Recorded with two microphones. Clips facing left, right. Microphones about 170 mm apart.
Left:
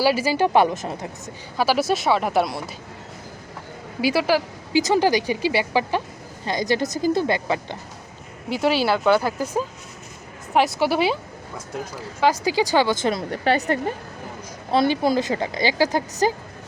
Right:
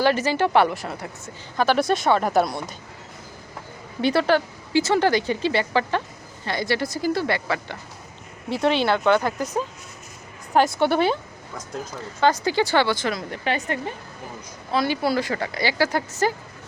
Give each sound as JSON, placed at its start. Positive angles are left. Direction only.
{"t": 0.0, "sound": "speech", "side_deg": 10}
{"t": 1.5, "sound": "speech", "side_deg": 5}
{"t": 4.0, "sound": "speech", "side_deg": 5}
{"t": 8.4, "sound": "speech", "side_deg": 5}
{"t": 13.1, "sound": "speech", "side_deg": 30}
{"t": 14.7, "sound": "speech", "side_deg": 25}